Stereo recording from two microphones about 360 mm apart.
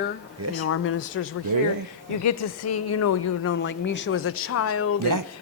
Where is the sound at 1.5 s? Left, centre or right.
Right.